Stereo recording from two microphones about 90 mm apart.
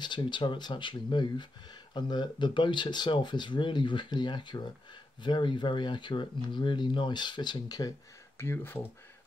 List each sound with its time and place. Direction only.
0.0 s speech: 60° left (ahead or behind)
8.4 s speech: 25° left (ahead or behind)